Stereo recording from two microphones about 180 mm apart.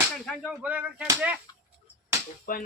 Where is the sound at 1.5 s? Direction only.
20° left (ahead or behind).